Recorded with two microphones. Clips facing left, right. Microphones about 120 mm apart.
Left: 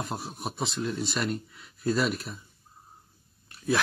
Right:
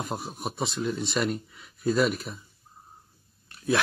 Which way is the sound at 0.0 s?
Centre (ahead or behind).